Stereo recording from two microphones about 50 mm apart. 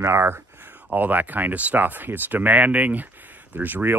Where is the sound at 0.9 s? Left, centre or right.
Right.